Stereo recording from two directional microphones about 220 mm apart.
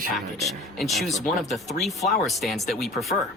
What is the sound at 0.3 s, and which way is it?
Speech, centre (ahead or behind).